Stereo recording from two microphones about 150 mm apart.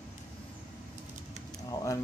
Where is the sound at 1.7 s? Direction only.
20° left (ahead or behind).